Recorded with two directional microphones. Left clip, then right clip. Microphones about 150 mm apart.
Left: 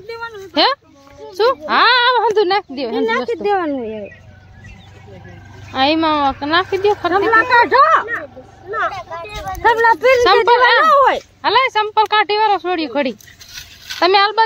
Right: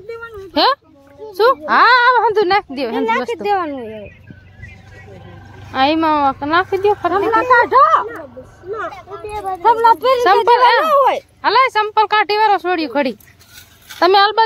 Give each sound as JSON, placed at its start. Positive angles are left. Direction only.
{"t": 0.1, "sound": "a sound", "side_deg": -10}
{"t": 1.3, "sound": "speech", "side_deg": -10}
{"t": 3.4, "sound": "speech", "side_deg": 60}
{"t": 5.7, "sound": "speech", "side_deg": -5}
{"t": 7.1, "sound": "a woman's voice", "side_deg": 80}
{"t": 9.6, "sound": "speech", "side_deg": 45}
{"t": 10.2, "sound": "speech", "side_deg": -5}
{"t": 10.9, "sound": "speech", "side_deg": 50}
{"t": 11.4, "sound": "speech", "side_deg": 0}
{"t": 14.0, "sound": "speech", "side_deg": -20}